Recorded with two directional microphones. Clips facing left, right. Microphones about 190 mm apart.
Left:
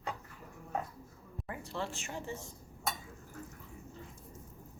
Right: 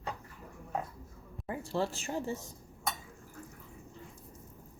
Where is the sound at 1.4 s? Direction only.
30° right (ahead or behind).